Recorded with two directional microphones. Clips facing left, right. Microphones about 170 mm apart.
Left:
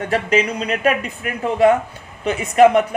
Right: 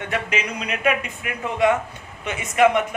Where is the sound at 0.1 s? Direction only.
35° left (ahead or behind).